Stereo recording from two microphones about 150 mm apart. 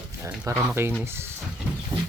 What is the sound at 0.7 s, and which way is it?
Speech, 15° right (ahead or behind).